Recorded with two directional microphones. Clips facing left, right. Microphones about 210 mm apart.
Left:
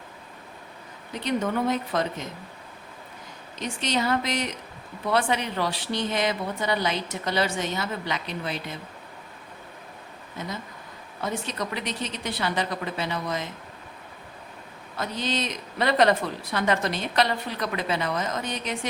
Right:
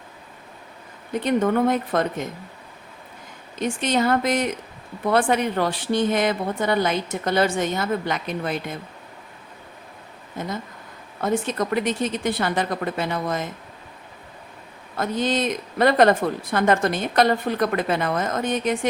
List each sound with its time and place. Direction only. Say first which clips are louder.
1.1 s a woman's voice: right 6 dB; 50° right (ahead or behind)
3.6 s a woman's voice: right 6 dB; 50° right (ahead or behind)
10.4 s a woman's voice: right 5 dB; 50° right (ahead or behind)
14.9 s a woman's voice: right 6 dB; 50° right (ahead or behind)